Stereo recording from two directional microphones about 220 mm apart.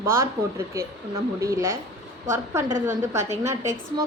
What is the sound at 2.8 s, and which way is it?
A woman's voice, 10° right (ahead or behind).